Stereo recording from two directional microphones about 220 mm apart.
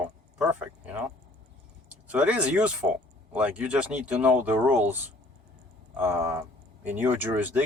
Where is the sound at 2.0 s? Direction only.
5° right (ahead or behind).